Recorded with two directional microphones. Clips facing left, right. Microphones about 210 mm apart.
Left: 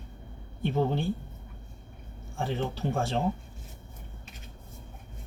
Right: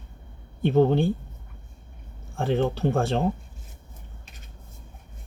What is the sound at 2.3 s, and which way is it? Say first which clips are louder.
Speech: right 7 dB; 60° right (ahead or behind).